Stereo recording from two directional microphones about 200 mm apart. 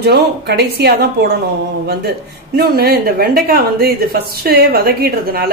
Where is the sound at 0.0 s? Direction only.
55° right (ahead or behind).